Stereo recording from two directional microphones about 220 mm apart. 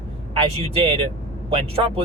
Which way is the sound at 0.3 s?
25° right (ahead or behind).